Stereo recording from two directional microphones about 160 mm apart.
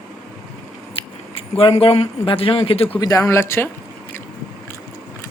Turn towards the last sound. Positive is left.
turn(degrees=15)  # may be behind; listen again after turning